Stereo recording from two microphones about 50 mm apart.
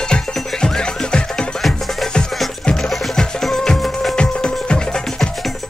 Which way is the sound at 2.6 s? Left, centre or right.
Centre.